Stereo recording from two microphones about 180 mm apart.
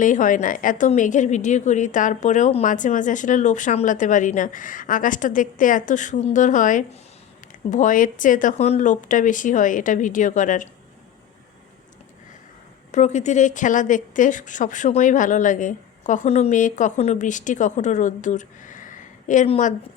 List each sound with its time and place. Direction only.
0.0 s a woman's voice: 45° left (ahead or behind)
12.9 s a woman's voice: 40° left (ahead or behind)